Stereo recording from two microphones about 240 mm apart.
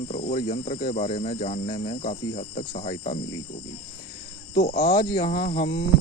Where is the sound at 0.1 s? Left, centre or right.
Left.